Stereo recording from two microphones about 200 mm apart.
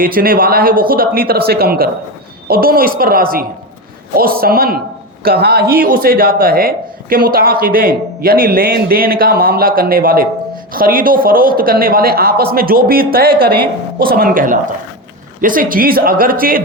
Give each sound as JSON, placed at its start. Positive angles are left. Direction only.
{"t": 0.0, "sound": "speech", "side_deg": -45}